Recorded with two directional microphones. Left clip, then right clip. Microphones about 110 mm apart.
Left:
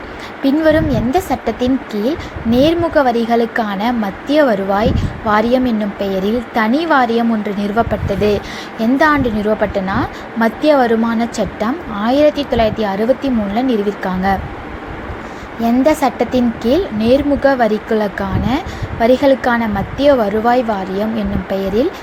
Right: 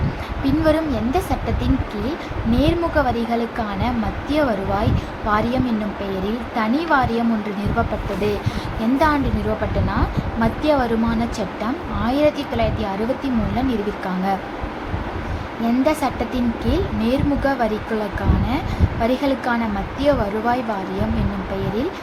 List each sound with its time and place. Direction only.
0.4 s speech: 45° left (ahead or behind)
10.4 s speech: 50° left (ahead or behind)
15.6 s speech: 55° left (ahead or behind)